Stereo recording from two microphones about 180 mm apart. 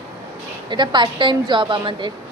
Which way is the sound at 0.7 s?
25° right (ahead or behind).